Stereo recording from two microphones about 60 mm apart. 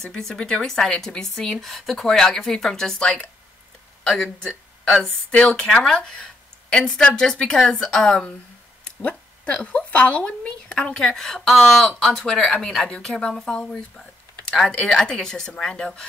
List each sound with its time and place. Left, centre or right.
0.2 s a woman's voice: centre
5.0 s a woman's voice: centre
9.0 s a woman's voice: left